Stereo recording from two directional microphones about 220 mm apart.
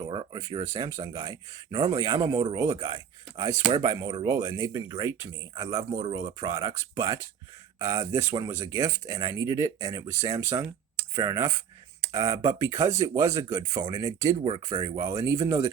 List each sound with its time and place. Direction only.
0.1 s speech: 20° right (ahead or behind)